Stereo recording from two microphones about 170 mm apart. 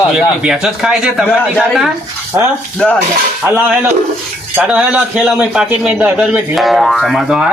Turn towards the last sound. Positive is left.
turn(degrees=-5)  # may be behind; listen again after turning